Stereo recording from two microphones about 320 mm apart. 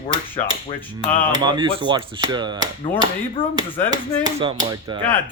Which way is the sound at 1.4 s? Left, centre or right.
Centre.